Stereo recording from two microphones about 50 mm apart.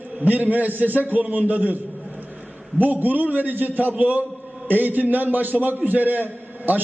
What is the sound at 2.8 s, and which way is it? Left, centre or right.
A man's voice, right.